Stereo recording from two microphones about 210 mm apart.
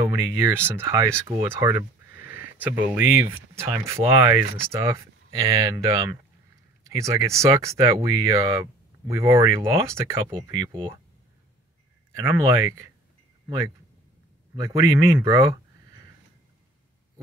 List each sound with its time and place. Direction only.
0.0 s speech: 15° right (ahead or behind)
12.2 s speech: 15° right (ahead or behind)
14.5 s speech: 15° right (ahead or behind)